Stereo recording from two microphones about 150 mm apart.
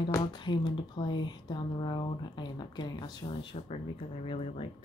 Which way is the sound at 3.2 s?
40° left (ahead or behind).